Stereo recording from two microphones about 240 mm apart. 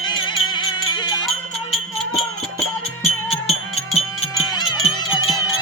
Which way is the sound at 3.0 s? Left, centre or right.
Left.